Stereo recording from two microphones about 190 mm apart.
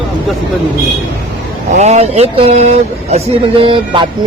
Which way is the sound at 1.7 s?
35° right (ahead or behind).